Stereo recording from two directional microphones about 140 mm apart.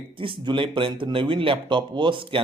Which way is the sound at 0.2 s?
35° right (ahead or behind).